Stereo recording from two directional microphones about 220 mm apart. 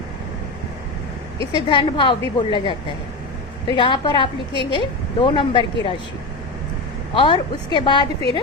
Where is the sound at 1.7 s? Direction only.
20° left (ahead or behind).